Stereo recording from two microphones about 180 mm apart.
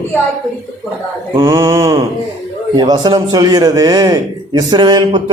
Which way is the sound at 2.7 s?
25° right (ahead or behind).